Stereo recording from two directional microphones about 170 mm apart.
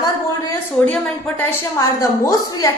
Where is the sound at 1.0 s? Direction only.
10° left (ahead or behind).